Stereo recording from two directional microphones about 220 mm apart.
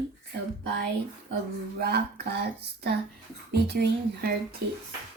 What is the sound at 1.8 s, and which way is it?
Speech, 45° right (ahead or behind).